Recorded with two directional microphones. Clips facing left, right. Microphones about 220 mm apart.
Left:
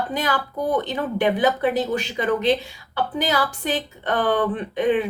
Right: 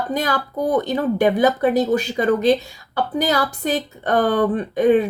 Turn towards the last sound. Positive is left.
turn(degrees=-40)  # may be behind; listen again after turning